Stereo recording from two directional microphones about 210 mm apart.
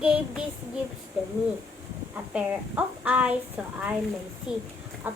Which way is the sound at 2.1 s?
5° right (ahead or behind).